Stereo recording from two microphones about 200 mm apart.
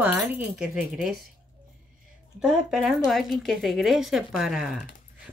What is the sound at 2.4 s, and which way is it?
A woman's voice, centre (ahead or behind).